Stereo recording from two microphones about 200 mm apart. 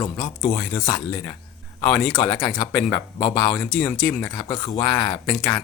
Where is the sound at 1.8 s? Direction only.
5° left (ahead or behind).